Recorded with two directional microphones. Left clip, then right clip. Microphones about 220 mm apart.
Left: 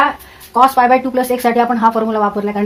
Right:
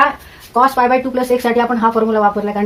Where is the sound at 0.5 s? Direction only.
40° left (ahead or behind).